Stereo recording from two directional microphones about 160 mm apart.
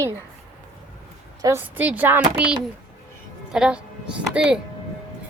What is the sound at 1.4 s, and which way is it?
A woman's voice, 15° right (ahead or behind).